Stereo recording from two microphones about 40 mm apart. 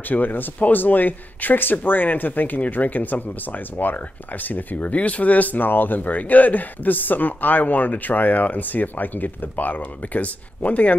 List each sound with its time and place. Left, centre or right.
0.1 s speech: left
4.9 s speech: left